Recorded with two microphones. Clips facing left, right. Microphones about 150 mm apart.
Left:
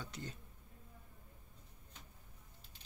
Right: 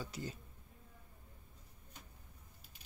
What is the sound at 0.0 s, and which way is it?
Speech, 5° right (ahead or behind).